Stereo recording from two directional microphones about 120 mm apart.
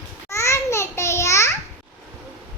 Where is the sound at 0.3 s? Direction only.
25° left (ahead or behind).